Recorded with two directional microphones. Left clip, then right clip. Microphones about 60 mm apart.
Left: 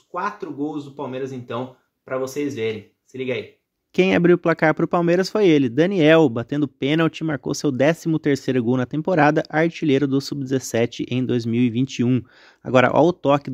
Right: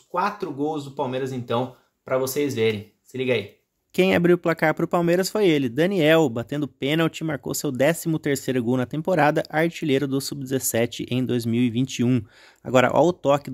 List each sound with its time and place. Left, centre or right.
0.1 s speech: right
3.9 s speech: left